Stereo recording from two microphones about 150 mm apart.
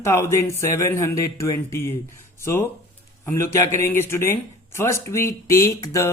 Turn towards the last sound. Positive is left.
turn(degrees=20)  # may be behind; listen again after turning